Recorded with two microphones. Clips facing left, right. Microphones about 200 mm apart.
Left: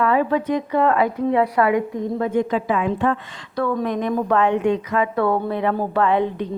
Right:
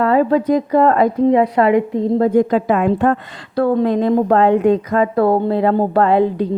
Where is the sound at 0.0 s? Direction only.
35° right (ahead or behind).